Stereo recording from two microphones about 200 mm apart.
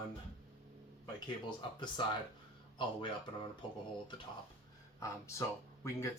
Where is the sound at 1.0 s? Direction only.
20° left (ahead or behind).